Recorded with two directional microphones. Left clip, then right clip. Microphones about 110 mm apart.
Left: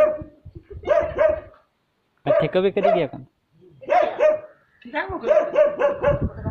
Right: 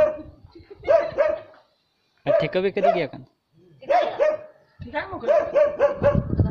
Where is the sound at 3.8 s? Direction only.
15° right (ahead or behind).